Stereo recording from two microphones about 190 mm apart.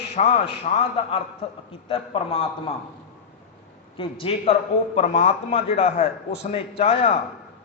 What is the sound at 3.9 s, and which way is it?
A man's voice, 30° left (ahead or behind).